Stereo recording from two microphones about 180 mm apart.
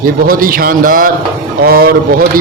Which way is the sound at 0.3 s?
50° right (ahead or behind).